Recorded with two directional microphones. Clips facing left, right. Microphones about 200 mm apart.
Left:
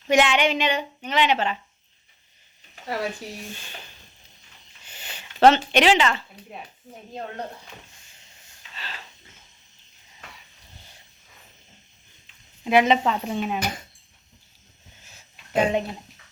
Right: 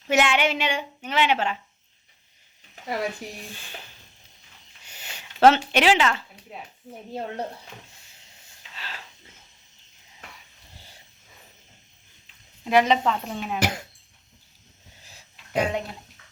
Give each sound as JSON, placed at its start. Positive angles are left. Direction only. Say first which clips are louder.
{"t": 0.1, "sound": "a woman's voice", "louder": "left 2 dB", "side_deg": -5}
{"t": 4.9, "sound": "speech", "louder": "left 1 dB", "side_deg": -10}
{"t": 8.7, "sound": "a sound", "louder": "even", "side_deg": -10}
{"t": 12.6, "sound": "a woman's voice", "louder": "left 1 dB", "side_deg": 5}
{"t": 13.6, "sound": "speech", "louder": "right 3 dB", "side_deg": -75}
{"t": 15.5, "sound": "speech", "louder": "left 3 dB", "side_deg": 20}